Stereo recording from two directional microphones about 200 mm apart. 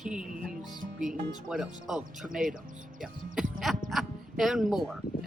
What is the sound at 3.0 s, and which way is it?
Music, 5° right (ahead or behind).